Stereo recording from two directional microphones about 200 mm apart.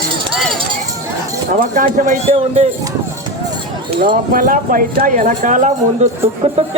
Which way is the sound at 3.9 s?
45° right (ahead or behind).